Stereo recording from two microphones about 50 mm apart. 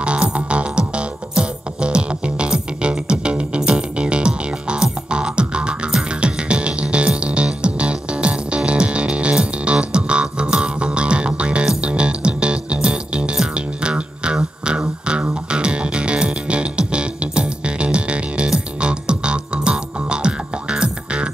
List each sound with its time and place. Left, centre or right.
0.0 s music: right